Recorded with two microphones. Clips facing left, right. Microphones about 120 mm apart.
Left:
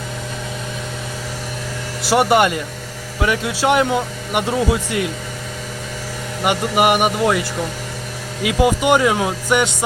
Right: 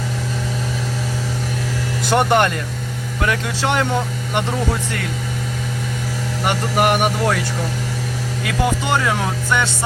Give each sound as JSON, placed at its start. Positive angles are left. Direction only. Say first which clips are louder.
{"t": 2.0, "sound": "speech", "louder": "left 2 dB", "side_deg": 5}
{"t": 6.4, "sound": "speech", "louder": "left 2 dB", "side_deg": 10}
{"t": 8.4, "sound": "speech", "louder": "left 5 dB", "side_deg": 15}